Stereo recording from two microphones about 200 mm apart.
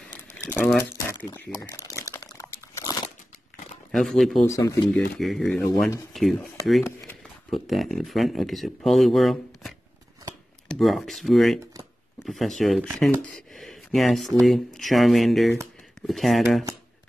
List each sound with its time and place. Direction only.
0.4 s speech: 10° left (ahead or behind)
1.0 s a sound: 15° left (ahead or behind)
2.1 s crunch: 15° left (ahead or behind)
3.9 s speech: centre (ahead or behind)
4.5 s speech: 15° left (ahead or behind)
5.2 s speech: centre (ahead or behind)
5.6 s speech: 10° left (ahead or behind)
6.1 s speech: centre (ahead or behind)
7.5 s speech: centre (ahead or behind)